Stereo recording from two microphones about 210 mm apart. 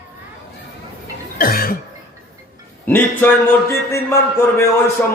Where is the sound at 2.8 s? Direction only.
10° left (ahead or behind).